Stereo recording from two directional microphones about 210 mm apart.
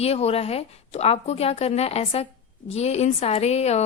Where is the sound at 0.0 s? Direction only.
30° left (ahead or behind).